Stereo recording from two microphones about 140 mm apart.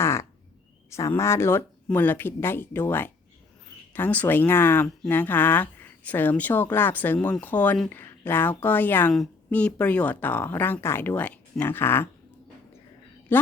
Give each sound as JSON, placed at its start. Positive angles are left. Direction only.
{"t": 0.0, "sound": "a sound", "side_deg": 20}
{"t": 0.9, "sound": "speech", "side_deg": 20}
{"t": 13.3, "sound": "speech", "side_deg": 15}